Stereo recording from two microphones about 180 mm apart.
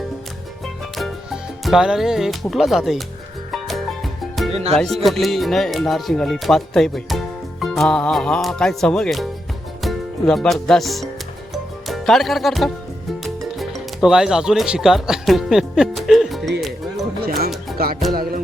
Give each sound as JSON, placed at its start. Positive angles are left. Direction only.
{"t": 0.9, "sound": "speech", "side_deg": 0}
{"t": 3.5, "sound": "music", "side_deg": 0}
{"t": 4.5, "sound": "speech", "side_deg": -35}
{"t": 5.0, "sound": "speech", "side_deg": 0}
{"t": 11.5, "sound": "music", "side_deg": 0}
{"t": 13.2, "sound": "speech", "side_deg": 0}
{"t": 16.6, "sound": "music", "side_deg": 0}
{"t": 17.2, "sound": "music", "side_deg": -55}